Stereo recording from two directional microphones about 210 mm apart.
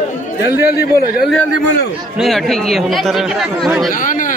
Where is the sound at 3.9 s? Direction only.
40° left (ahead or behind).